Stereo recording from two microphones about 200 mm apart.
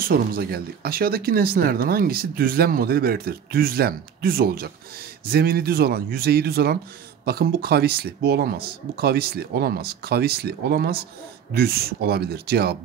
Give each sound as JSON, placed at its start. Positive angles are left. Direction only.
{"t": 0.0, "sound": "speech", "side_deg": -50}